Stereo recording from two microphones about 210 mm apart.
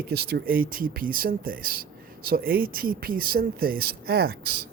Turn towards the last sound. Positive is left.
turn(degrees=-50)  # may be behind; listen again after turning